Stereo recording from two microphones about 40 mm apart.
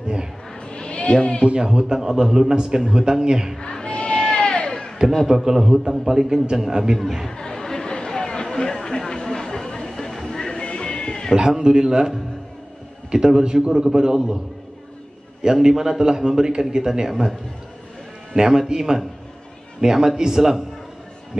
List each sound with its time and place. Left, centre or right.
0.6 s a sound: left
1.4 s a man's voice: right
3.5 s a sound: centre
5.2 s a man's voice: centre
7.2 s chatter: centre
11.3 s a man's voice: centre
13.1 s a man's voice: centre
15.4 s a man's voice: centre
17.1 s a man's voice: centre